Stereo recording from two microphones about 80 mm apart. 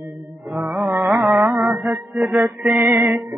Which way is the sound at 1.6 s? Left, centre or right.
Centre.